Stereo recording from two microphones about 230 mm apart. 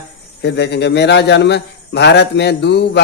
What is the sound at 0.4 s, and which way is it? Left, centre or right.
A man's voice, left.